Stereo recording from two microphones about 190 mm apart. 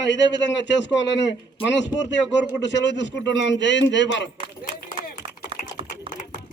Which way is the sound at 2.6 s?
70° left (ahead or behind).